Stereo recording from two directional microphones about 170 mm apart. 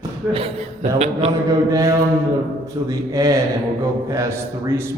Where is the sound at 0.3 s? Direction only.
35° right (ahead or behind).